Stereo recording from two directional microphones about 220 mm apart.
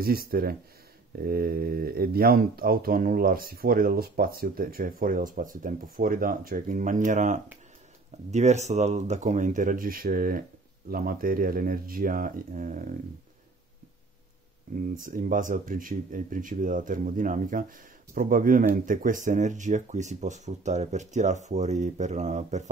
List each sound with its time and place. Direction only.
0.0 s speech: 45° right (ahead or behind)
14.8 s speech: 40° right (ahead or behind)